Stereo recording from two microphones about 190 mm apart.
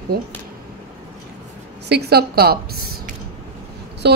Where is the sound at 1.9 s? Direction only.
60° right (ahead or behind).